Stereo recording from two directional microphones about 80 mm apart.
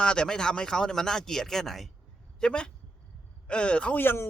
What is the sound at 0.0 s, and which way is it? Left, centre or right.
Speech, centre.